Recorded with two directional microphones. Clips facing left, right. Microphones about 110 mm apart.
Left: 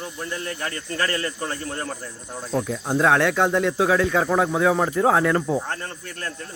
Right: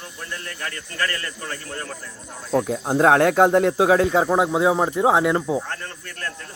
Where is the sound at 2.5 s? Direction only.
40° right (ahead or behind).